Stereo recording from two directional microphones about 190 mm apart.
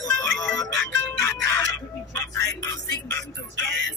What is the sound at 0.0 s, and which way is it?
Music, 20° left (ahead or behind).